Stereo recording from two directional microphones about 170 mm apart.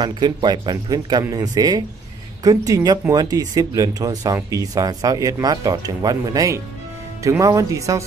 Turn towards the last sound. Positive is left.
turn(degrees=-20)  # may be behind; listen again after turning